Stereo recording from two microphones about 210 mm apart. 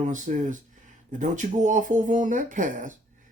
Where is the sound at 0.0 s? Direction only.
35° right (ahead or behind).